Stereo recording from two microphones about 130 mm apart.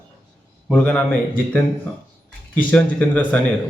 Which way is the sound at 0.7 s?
10° left (ahead or behind).